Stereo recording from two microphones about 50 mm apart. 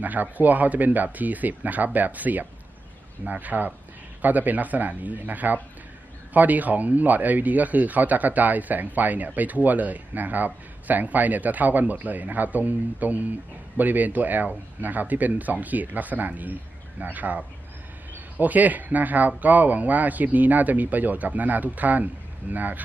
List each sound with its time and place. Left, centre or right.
0.0 s speech: right